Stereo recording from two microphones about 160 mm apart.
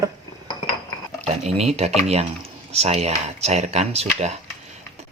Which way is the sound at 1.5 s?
40° right (ahead or behind).